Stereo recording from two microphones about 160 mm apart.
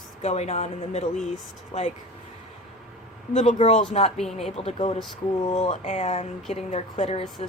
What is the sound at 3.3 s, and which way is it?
Speech, 50° left (ahead or behind).